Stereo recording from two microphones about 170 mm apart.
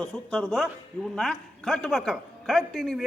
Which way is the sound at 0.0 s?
5° left (ahead or behind).